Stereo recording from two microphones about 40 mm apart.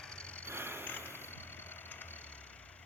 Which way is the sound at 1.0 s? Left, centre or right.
Left.